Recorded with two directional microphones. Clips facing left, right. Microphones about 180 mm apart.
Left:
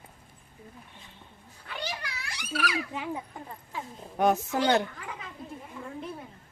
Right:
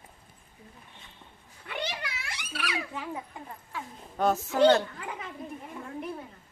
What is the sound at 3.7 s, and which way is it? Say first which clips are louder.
A woman's voice: left 2 dB; 15° left (ahead or behind).